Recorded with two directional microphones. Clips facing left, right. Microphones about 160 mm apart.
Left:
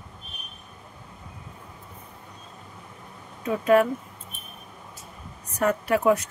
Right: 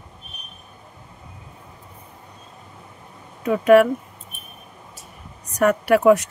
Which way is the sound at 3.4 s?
75° right (ahead or behind).